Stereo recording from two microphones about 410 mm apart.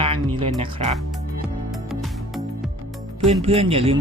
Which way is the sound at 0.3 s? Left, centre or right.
Centre.